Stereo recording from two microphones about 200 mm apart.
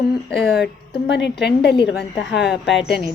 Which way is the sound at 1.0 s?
60° left (ahead or behind).